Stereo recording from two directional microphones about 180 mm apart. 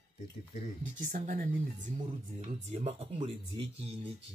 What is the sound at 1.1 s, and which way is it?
Speech, 50° right (ahead or behind).